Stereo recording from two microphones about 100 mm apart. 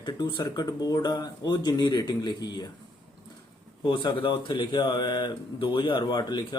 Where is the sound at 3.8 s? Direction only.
50° left (ahead or behind).